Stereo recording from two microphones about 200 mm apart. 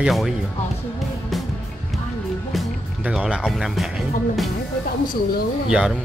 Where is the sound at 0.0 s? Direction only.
Centre (ahead or behind).